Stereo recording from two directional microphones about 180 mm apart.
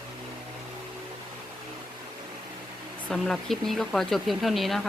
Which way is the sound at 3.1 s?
Centre (ahead or behind).